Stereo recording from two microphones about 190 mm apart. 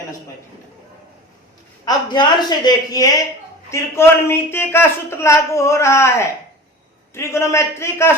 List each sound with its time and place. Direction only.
1.8 s speech: 20° left (ahead or behind)